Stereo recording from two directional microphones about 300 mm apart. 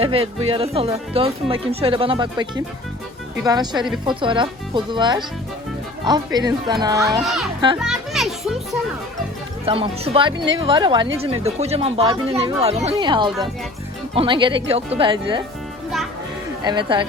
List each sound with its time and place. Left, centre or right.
0.0 s speech: centre
7.2 s a child's voice: centre
7.8 s children playing: centre
9.6 s speech: centre
16.6 s speech: centre